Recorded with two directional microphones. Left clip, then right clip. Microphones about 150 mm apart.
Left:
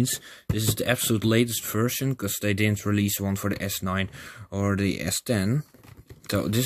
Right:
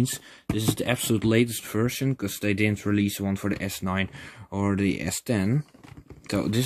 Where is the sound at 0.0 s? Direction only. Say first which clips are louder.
Left 1 dB; 10° left (ahead or behind).